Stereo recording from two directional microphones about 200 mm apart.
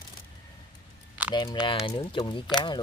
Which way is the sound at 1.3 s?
20° left (ahead or behind).